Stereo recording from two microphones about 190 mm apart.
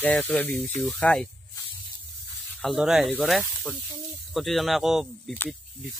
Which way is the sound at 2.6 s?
Centre (ahead or behind).